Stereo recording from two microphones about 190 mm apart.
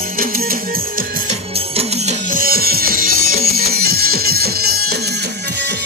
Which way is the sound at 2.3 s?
50° right (ahead or behind).